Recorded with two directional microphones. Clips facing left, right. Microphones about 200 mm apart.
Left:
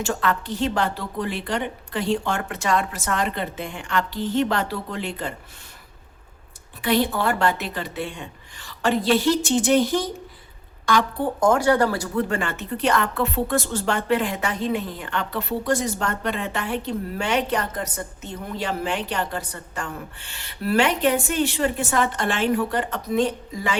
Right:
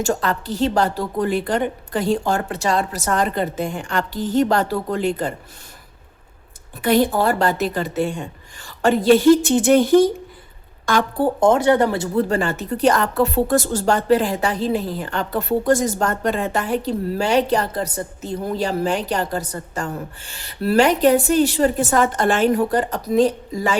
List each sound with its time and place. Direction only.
0.0 s speech: 40° right (ahead or behind)
6.8 s speech: 45° right (ahead or behind)
11.3 s speech: 25° right (ahead or behind); by 23.7 s 40° right (ahead or behind)